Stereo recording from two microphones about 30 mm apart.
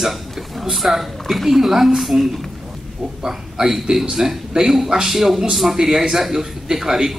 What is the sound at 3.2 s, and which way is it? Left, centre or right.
A man's voice, centre.